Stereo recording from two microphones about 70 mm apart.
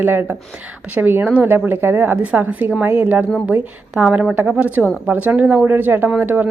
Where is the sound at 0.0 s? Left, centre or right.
Right.